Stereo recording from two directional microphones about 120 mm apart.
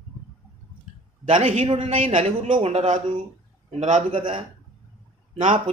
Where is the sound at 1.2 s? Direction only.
90° right.